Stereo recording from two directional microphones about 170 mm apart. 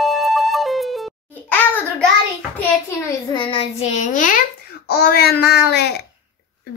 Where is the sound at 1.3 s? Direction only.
10° left (ahead or behind).